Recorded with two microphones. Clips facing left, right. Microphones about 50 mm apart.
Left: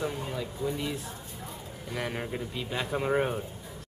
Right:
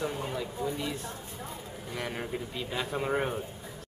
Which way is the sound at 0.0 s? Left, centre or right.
Centre.